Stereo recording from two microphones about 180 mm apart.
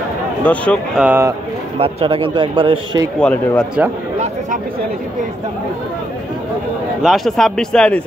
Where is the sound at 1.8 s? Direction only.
30° right (ahead or behind).